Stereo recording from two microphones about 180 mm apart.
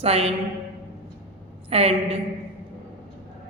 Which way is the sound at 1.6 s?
35° right (ahead or behind).